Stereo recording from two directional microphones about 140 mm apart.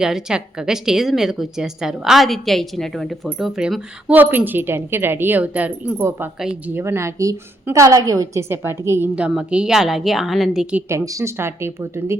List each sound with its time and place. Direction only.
0.0 s a woman's voice: 5° right (ahead or behind)
10.8 s speech: 20° right (ahead or behind)